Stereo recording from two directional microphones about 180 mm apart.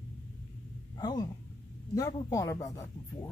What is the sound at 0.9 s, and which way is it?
Speech, 20° left (ahead or behind).